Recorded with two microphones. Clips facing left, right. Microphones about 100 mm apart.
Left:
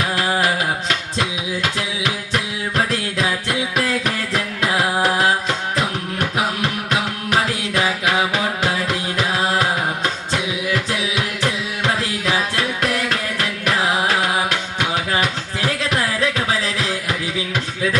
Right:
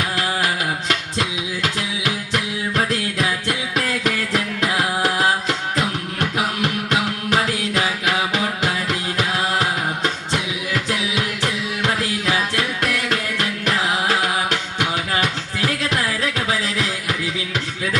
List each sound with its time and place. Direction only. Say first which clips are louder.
0.2 s music: left 4 dB; 30° left (ahead or behind)
10.7 s music: even; 30° left (ahead or behind)